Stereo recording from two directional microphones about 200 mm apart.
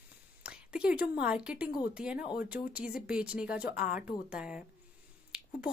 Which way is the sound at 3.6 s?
50° left (ahead or behind).